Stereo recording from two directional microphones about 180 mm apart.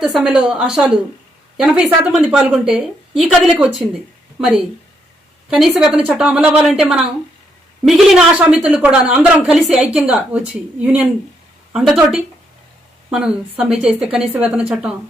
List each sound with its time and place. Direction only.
0.0 s a woman's voice: centre (ahead or behind)
11.7 s a woman's voice: 5° right (ahead or behind)